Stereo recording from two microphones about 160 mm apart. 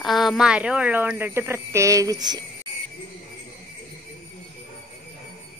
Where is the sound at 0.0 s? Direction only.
Centre (ahead or behind); by 2.4 s 25° right (ahead or behind).